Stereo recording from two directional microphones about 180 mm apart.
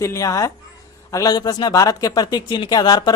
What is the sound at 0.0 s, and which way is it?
Speech, 15° left (ahead or behind).